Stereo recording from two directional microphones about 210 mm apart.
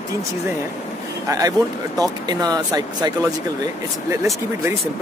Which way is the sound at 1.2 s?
15° right (ahead or behind).